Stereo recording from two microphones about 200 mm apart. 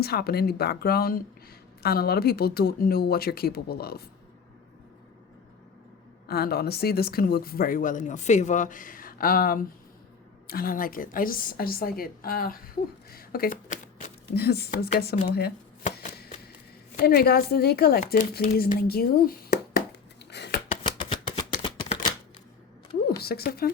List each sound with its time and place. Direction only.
0.0 s a woman's voice: 50° left (ahead or behind)
6.2 s a woman's voice: 50° left (ahead or behind)
16.0 s a sound: 50° left (ahead or behind)
17.0 s a woman's voice: 50° left (ahead or behind)
20.3 s scissors: 60° left (ahead or behind)
20.7 s shuffling cards: 25° left (ahead or behind)
23.2 s a woman's voice: 50° left (ahead or behind)